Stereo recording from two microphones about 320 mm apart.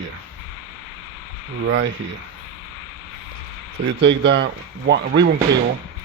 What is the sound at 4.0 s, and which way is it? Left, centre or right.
Speech, right.